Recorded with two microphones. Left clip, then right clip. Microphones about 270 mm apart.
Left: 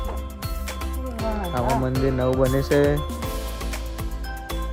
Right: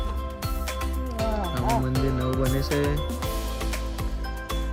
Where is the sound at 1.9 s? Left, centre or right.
Centre.